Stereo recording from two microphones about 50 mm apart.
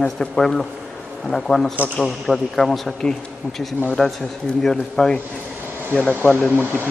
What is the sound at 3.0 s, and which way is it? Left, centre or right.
Speech, centre.